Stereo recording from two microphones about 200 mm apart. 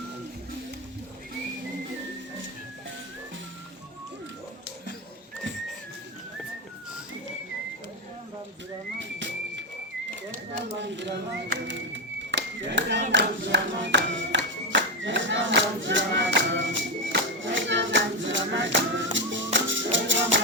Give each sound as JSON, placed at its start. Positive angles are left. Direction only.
{"t": 9.0, "sound": "a sound", "side_deg": -65}
{"t": 10.8, "sound": "speech", "side_deg": -60}
{"t": 12.3, "sound": "clapping", "side_deg": -65}
{"t": 19.5, "sound": "music", "side_deg": -65}